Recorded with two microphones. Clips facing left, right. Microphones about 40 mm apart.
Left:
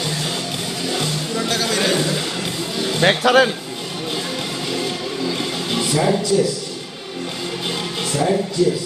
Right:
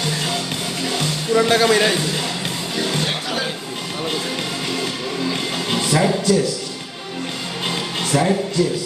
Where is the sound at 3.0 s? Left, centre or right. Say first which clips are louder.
Left 10 dB; left.